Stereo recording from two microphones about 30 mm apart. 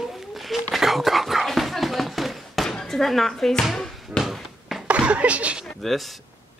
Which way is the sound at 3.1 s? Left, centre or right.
Centre.